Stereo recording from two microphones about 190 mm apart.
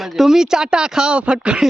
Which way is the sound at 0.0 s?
Centre (ahead or behind).